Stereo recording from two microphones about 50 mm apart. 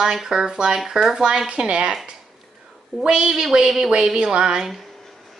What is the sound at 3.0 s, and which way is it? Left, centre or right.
Speech, centre.